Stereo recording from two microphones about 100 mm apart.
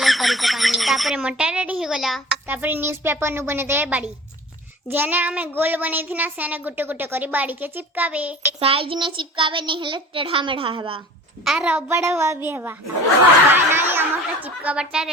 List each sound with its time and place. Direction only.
0.0 s speech: centre (ahead or behind)
2.5 s a woman's voice: 20° right (ahead or behind)
3.8 s child singing: 15° right (ahead or behind)
8.6 s child singing: 65° right (ahead or behind)
11.4 s child singing: 10° right (ahead or behind)
11.9 s a woman's voice: 30° right (ahead or behind)
14.4 s child singing: 15° right (ahead or behind)